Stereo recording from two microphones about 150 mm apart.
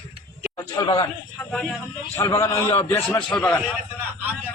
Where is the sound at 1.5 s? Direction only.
5° left (ahead or behind).